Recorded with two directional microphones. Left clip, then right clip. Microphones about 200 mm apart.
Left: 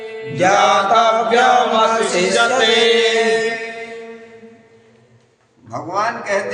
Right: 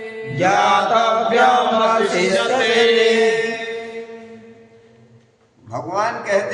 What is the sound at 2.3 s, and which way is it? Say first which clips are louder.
Music: left 3 dB; 50° left (ahead or behind).